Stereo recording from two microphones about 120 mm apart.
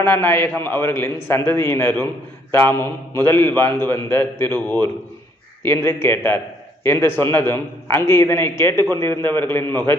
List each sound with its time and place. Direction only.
0.0 s a man's voice: 20° left (ahead or behind)
5.6 s a man's voice: 20° left (ahead or behind)